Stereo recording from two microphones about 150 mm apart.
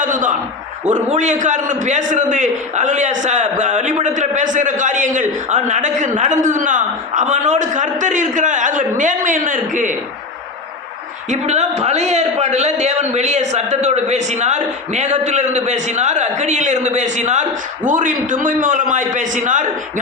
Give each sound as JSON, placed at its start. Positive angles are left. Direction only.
{"t": 0.0, "sound": "a sound", "side_deg": -60}
{"t": 0.9, "sound": "a man's voice", "side_deg": -55}
{"t": 11.3, "sound": "a man's voice", "side_deg": -50}